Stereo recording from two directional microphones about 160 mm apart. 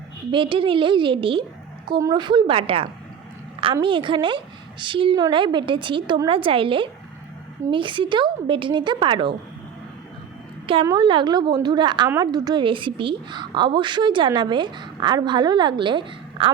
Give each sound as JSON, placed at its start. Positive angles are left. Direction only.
{"t": 0.3, "sound": "a woman's voice", "side_deg": -30}
{"t": 10.8, "sound": "a woman's voice", "side_deg": -25}